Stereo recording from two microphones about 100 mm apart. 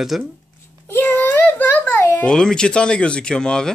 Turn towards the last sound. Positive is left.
turn(degrees=5)  # may be behind; listen again after turning